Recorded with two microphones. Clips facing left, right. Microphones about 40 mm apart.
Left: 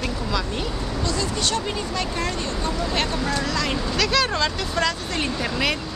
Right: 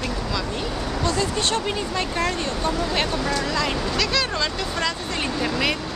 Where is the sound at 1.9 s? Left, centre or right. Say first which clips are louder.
Right 3 dB; right.